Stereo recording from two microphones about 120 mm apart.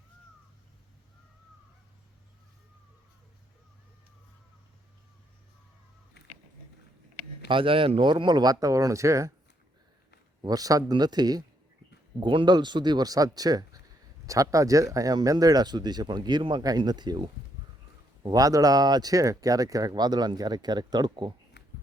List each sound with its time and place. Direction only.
7.4 s speech: 45° right (ahead or behind); by 9.3 s 25° right (ahead or behind)
10.4 s speech: 30° right (ahead or behind)